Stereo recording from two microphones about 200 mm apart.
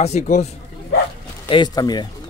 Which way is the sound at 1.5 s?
20° left (ahead or behind).